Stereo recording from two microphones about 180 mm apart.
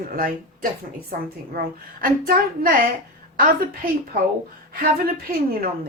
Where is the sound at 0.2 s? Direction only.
50° right (ahead or behind).